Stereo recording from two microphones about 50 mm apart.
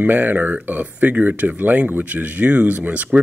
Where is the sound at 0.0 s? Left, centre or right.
Right.